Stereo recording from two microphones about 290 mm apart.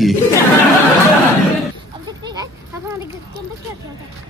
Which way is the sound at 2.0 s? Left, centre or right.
Centre.